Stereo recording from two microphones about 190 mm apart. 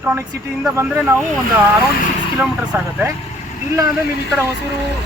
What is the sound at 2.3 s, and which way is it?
Speech, 15° right (ahead or behind).